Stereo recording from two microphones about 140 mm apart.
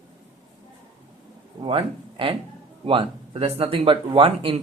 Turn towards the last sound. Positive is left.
turn(degrees=-40)  # may be behind; listen again after turning